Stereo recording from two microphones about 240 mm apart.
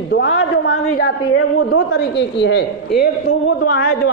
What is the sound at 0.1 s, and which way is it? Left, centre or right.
A man's voice, left.